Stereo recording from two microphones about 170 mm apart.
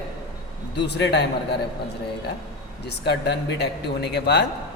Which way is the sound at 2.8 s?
80° left.